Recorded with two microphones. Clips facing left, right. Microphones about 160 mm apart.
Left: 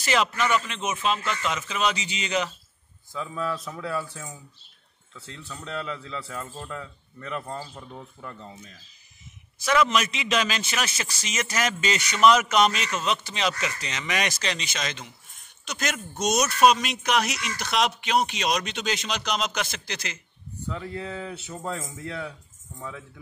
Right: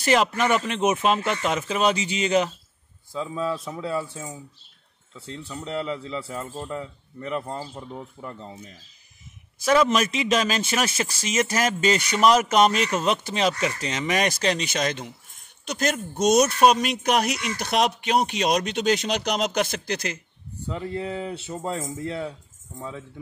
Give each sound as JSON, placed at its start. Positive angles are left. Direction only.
{"t": 0.0, "sound": "speech", "side_deg": -50}
{"t": 3.1, "sound": "speech", "side_deg": -20}
{"t": 9.8, "sound": "speech", "side_deg": -45}
{"t": 15.7, "sound": "speech", "side_deg": -35}
{"t": 17.6, "sound": "speech", "side_deg": -50}
{"t": 20.7, "sound": "speech", "side_deg": -20}